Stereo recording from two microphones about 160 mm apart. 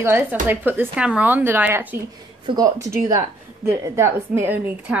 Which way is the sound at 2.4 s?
25° right (ahead or behind).